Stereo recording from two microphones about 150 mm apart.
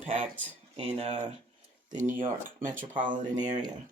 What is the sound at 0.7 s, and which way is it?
Speech, 45° right (ahead or behind).